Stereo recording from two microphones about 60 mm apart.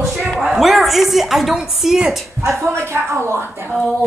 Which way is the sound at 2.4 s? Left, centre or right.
Right.